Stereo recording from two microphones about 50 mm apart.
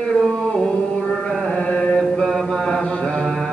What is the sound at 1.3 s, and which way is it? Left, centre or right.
Carnatic music, centre.